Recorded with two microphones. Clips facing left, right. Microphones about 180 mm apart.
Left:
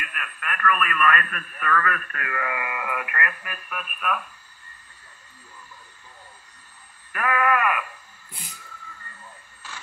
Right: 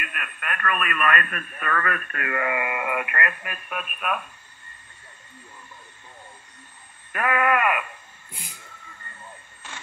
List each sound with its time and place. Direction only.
0.0 s speech: 25° right (ahead or behind)
7.1 s speech: 25° right (ahead or behind)
8.5 s a sound: 25° right (ahead or behind)